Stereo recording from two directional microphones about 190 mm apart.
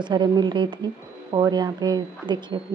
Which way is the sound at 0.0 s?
25° right (ahead or behind).